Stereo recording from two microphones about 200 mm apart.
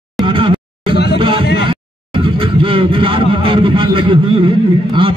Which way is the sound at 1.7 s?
25° right (ahead or behind).